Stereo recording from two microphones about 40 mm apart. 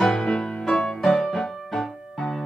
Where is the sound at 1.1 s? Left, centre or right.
Centre.